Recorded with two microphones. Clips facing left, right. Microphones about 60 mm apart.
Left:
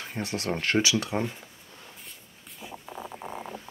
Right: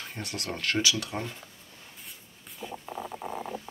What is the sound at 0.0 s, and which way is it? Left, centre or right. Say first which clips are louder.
Speech: left 5 dB; left.